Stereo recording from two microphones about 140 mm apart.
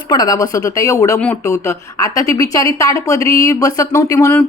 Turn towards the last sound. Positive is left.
turn(degrees=20)  # may be behind; listen again after turning